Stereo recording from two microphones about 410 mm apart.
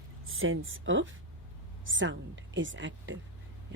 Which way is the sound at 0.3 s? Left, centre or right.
Right.